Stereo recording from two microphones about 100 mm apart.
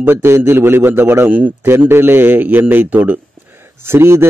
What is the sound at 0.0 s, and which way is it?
A man's voice, 25° right (ahead or behind).